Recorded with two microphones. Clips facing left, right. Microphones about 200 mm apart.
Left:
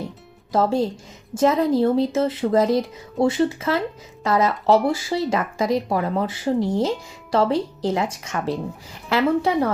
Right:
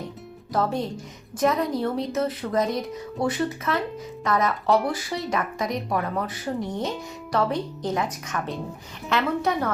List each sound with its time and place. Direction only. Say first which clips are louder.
0.5 s speech: left 5 dB; 25° left (ahead or behind)